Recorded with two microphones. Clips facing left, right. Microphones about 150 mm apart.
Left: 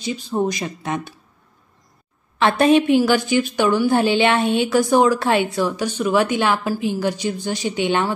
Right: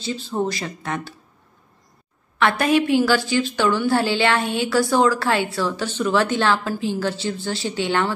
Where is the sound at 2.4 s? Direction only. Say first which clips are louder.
Left 4 dB; 25° left (ahead or behind).